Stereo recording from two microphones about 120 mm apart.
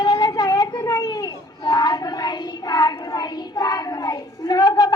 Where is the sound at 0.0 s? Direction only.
35° left (ahead or behind).